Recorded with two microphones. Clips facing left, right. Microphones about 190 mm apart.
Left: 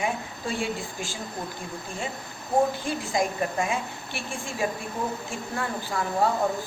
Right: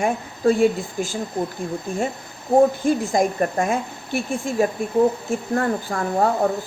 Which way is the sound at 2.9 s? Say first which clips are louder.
Right 8 dB; 45° right (ahead or behind).